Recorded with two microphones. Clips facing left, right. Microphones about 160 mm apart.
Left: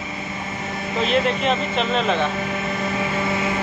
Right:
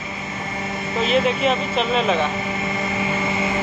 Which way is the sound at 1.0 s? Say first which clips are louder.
Right 1 dB; centre (ahead or behind).